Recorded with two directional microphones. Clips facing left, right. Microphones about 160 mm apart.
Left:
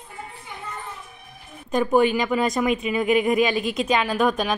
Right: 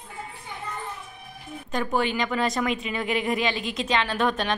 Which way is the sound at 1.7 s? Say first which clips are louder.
Left 7 dB; 15° left (ahead or behind).